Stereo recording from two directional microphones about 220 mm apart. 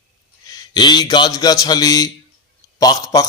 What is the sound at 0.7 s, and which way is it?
Speech, 20° left (ahead or behind).